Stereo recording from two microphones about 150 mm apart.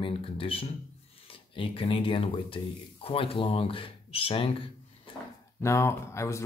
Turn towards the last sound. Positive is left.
turn(degrees=20)  # may be behind; listen again after turning